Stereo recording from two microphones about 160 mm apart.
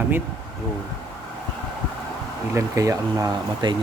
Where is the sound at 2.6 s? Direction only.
20° right (ahead or behind).